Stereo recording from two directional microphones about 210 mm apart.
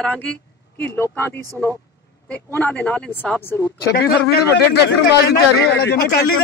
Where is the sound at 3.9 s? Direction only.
50° left (ahead or behind).